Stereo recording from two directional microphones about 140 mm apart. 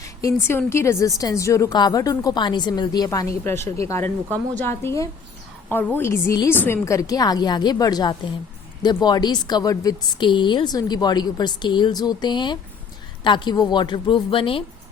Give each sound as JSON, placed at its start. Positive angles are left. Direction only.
{"t": 0.0, "sound": "a woman's voice", "side_deg": 25}